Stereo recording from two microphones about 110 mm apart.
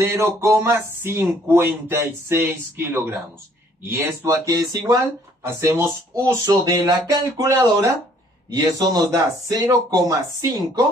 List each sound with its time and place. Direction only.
0.0 s speech: 25° right (ahead or behind)
4.5 s speech: 35° right (ahead or behind)